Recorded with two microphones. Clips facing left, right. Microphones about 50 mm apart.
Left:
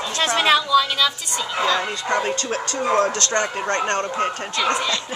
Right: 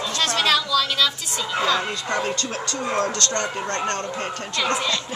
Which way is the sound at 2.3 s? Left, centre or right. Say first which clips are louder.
Left 3 dB; left.